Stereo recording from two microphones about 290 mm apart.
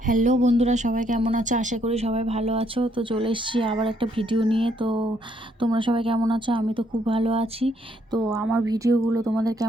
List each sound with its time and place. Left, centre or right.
0.0 s speech: right
8.4 s speech: centre